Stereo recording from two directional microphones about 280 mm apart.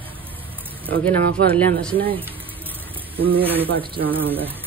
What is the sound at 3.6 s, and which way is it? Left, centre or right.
Speech, centre.